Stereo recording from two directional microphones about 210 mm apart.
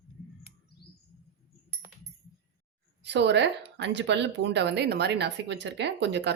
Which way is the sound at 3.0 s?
55° right (ahead or behind).